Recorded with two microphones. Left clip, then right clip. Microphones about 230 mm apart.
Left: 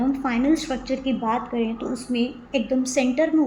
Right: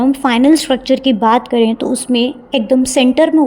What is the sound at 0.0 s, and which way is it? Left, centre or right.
A woman's voice, right.